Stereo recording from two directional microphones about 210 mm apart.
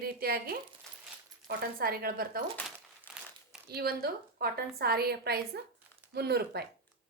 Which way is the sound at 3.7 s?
50° right (ahead or behind).